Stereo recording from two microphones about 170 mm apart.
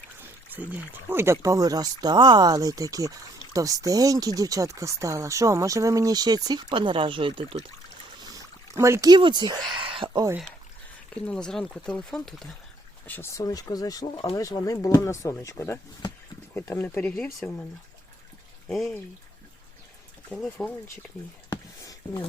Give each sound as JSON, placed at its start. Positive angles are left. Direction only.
{"t": 0.2, "sound": "speech", "side_deg": -10}
{"t": 8.2, "sound": "a sound", "side_deg": -20}
{"t": 11.1, "sound": "speech", "side_deg": 5}
{"t": 13.1, "sound": "speech", "side_deg": 15}
{"t": 18.7, "sound": "speech", "side_deg": 0}
{"t": 20.3, "sound": "speech", "side_deg": 5}
{"t": 21.5, "sound": "a sound", "side_deg": 20}